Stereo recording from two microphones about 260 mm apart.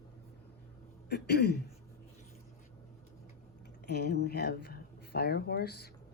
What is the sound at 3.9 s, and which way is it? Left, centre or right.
Speech, left.